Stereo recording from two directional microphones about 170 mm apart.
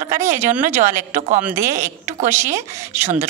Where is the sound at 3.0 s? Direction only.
50° right (ahead or behind).